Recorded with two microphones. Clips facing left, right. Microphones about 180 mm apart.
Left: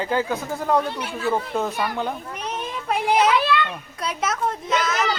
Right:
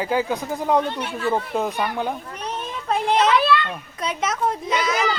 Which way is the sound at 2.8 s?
5° left (ahead or behind).